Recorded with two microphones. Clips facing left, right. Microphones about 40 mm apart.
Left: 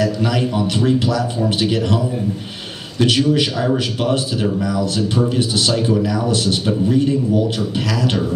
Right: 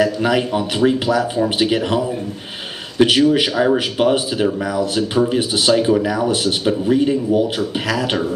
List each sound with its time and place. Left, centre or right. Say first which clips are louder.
0.0 s speech: right 2 dB; centre
3.2 s speech: right 2 dB; centre